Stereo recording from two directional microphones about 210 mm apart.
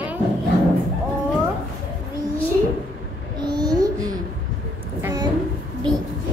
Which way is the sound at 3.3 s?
20° right (ahead or behind).